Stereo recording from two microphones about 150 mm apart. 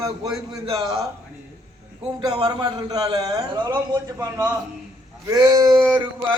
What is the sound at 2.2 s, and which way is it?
A man's voice, 30° right (ahead or behind).